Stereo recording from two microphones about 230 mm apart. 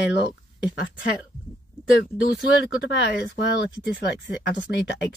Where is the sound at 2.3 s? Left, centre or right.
Left.